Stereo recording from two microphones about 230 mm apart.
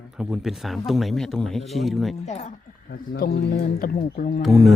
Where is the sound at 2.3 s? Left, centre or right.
Left.